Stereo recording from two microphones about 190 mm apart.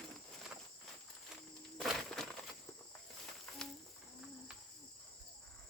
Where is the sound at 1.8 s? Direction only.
Centre (ahead or behind).